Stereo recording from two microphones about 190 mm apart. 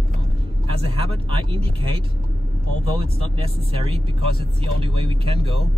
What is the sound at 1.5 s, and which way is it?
Speech, 30° right (ahead or behind).